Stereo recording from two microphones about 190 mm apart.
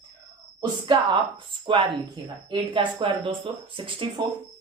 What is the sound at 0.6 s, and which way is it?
Speech, 25° right (ahead or behind).